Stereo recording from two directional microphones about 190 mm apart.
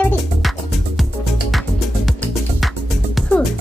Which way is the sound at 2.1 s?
Centre (ahead or behind).